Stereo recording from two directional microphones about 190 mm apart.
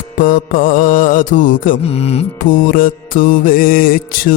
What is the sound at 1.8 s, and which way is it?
Music, 30° left (ahead or behind).